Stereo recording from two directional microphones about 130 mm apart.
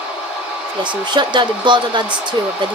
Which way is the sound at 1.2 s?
35° right (ahead or behind).